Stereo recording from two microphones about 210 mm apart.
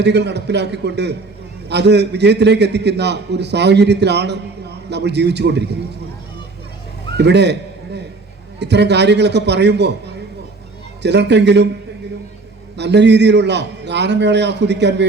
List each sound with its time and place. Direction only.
0.0 s a man's voice: 55° right (ahead or behind)
7.2 s a man's voice: 55° right (ahead or behind)
8.5 s a man's voice: 55° right (ahead or behind)
11.0 s a man's voice: 55° right (ahead or behind)
12.7 s a man's voice: 55° right (ahead or behind)